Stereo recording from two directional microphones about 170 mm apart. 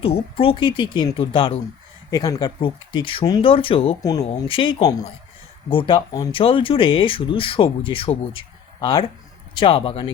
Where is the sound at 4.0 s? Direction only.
20° left (ahead or behind).